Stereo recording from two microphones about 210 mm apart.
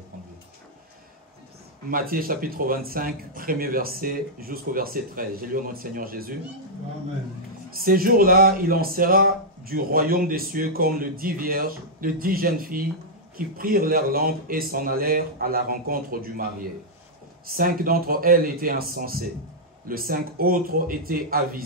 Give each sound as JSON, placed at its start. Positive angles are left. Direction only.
{"t": 1.9, "sound": "speech", "side_deg": -45}
{"t": 7.8, "sound": "speech", "side_deg": -45}